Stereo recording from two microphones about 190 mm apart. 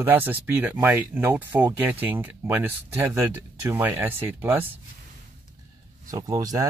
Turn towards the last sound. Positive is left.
turn(degrees=-20)  # may be behind; listen again after turning